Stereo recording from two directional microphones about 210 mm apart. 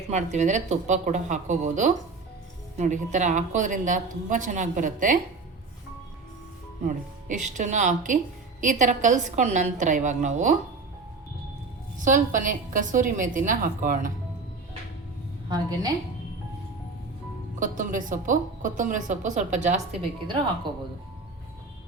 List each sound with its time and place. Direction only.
0.1 s a woman's voice: 35° right (ahead or behind)
6.8 s a woman's voice: 35° right (ahead or behind)
11.9 s a woman's voice: 35° right (ahead or behind)
15.4 s a woman's voice: 20° right (ahead or behind)
17.6 s a woman's voice: 40° right (ahead or behind)